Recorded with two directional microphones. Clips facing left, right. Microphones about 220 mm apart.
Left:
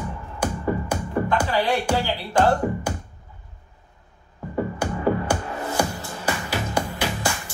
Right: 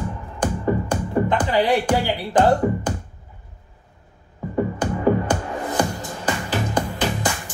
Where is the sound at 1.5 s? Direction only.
15° right (ahead or behind).